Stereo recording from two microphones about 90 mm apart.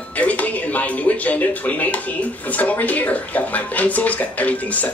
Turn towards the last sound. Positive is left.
turn(degrees=15)  # may be behind; listen again after turning